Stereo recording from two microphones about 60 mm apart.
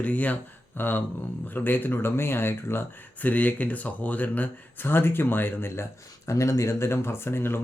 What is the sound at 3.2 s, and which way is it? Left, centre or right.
Speech, left.